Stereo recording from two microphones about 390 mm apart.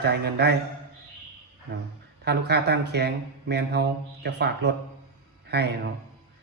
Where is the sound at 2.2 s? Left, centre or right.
Right.